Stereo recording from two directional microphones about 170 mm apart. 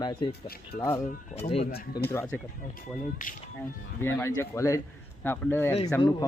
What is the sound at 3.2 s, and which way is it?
Speech, 50° left (ahead or behind).